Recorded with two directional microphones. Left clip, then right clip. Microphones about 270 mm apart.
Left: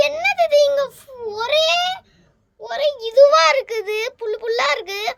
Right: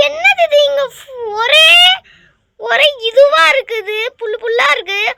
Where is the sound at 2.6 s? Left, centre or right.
Centre.